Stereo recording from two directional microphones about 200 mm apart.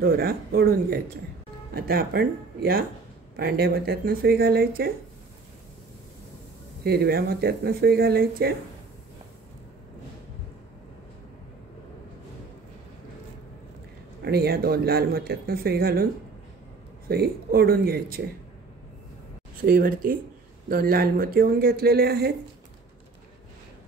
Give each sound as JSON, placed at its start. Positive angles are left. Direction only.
{"t": 0.0, "sound": "speech", "side_deg": -50}
{"t": 6.8, "sound": "speech", "side_deg": -50}
{"t": 14.2, "sound": "speech", "side_deg": -50}
{"t": 17.1, "sound": "speech", "side_deg": -50}
{"t": 19.6, "sound": "speech", "side_deg": -45}